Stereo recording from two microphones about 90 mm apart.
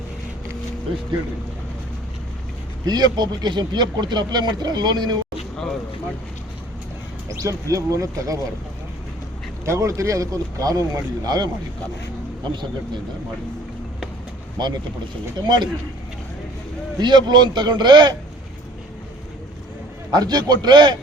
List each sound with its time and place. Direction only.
2.8 s speech: 50° right (ahead or behind)
7.3 s speech: 40° right (ahead or behind)
9.6 s speech: 35° right (ahead or behind)
12.5 s a man's voice: 55° right (ahead or behind)
14.6 s a man's voice: 55° right (ahead or behind)
17.0 s a man's voice: 55° right (ahead or behind)
20.1 s speech: 50° right (ahead or behind)